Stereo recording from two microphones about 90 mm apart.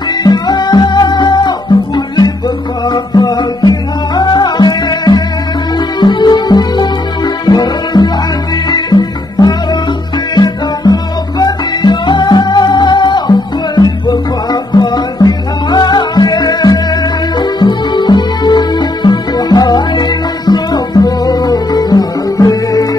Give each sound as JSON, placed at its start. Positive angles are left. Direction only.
{"t": 0.2, "sound": "music", "side_deg": 50}